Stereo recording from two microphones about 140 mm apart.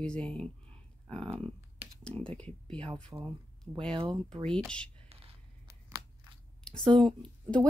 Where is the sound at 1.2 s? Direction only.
45° right (ahead or behind).